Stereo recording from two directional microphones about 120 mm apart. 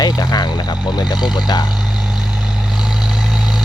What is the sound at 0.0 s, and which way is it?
Speech, 35° left (ahead or behind).